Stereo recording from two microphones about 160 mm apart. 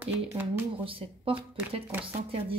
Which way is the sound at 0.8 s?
35° right (ahead or behind).